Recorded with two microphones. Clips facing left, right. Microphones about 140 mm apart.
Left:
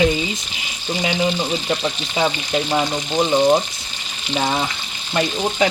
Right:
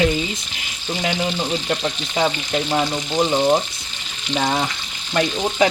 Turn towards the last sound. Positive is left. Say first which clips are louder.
# right 1 dB
turn(degrees=5)  # may be behind; listen again after turning